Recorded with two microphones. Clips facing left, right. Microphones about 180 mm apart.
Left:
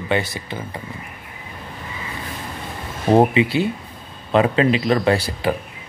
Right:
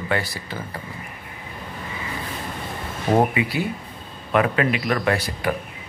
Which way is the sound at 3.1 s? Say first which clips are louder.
Left 5 dB; 25° left (ahead or behind).